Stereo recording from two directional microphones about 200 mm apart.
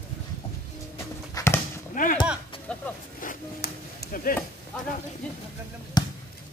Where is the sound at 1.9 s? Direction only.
40° left (ahead or behind).